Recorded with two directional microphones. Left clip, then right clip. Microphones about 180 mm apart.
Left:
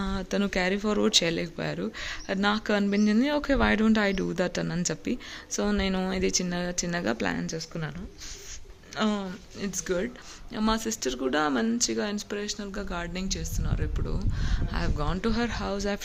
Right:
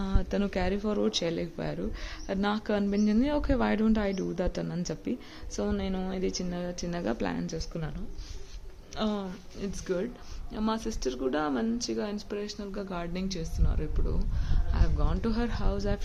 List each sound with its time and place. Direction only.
0.0 s speech: 5° left (ahead or behind)
9.0 s speech: 5° left (ahead or behind)
14.7 s speech: 10° left (ahead or behind)